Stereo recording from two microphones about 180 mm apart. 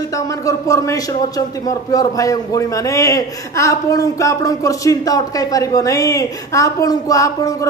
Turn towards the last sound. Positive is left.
turn(degrees=15)  # may be behind; listen again after turning